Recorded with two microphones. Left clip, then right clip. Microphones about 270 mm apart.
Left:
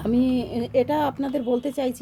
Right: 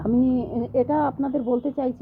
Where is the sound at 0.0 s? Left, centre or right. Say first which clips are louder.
Right 1 dB; left.